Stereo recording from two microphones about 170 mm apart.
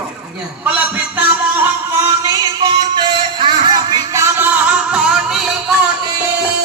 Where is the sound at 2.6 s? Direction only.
30° right (ahead or behind).